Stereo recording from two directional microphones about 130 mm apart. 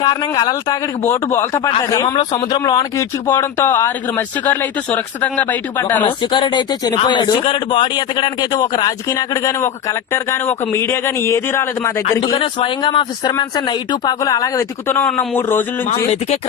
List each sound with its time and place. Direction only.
0.0 s a man's voice: 35° left (ahead or behind)
1.0 s a man's voice: 20° left (ahead or behind)
3.2 s speech: 20° left (ahead or behind)
6.0 s a man's voice: 40° left (ahead or behind); by 12.0 s 20° left (ahead or behind)
12.4 s a man's voice: 40° left (ahead or behind); by 15.0 s 20° left (ahead or behind)
15.0 s speech: 10° left (ahead or behind)